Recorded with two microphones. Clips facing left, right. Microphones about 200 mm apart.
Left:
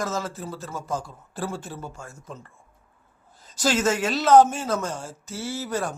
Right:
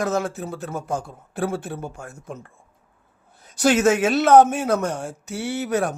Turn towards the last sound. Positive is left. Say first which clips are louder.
# right 5 dB
turn(degrees=-60)  # may be behind; listen again after turning